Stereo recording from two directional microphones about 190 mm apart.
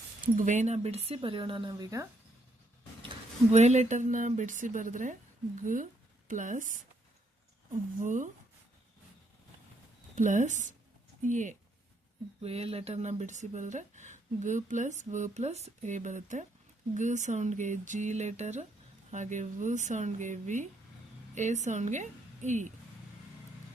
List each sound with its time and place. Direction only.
0.3 s speech: 40° right (ahead or behind); by 2.0 s 20° right (ahead or behind)
3.5 s speech: 35° right (ahead or behind)
8.0 s speech: 40° right (ahead or behind)
10.2 s a woman's voice: 40° right (ahead or behind)